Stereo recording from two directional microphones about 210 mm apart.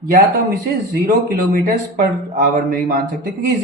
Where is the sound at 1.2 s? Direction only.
45° right (ahead or behind).